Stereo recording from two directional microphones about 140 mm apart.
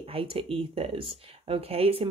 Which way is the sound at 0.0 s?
40° right (ahead or behind).